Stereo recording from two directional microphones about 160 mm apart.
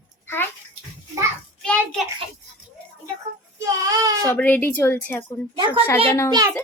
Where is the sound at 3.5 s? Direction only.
20° right (ahead or behind).